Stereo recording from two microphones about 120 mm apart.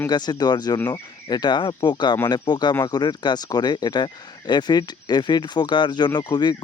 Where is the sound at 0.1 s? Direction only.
35° left (ahead or behind).